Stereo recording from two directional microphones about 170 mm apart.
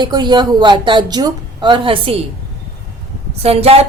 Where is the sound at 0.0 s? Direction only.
25° right (ahead or behind).